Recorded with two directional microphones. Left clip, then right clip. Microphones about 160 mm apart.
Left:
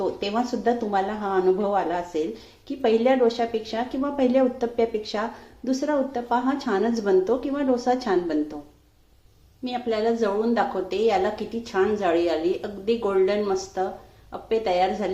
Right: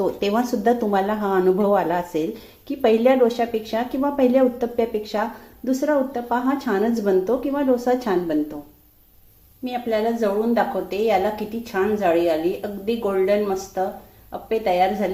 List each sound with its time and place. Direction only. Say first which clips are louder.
0.0 s a woman's voice: right 4 dB; 25° right (ahead or behind)
9.6 s a woman's voice: right 2 dB; 10° right (ahead or behind)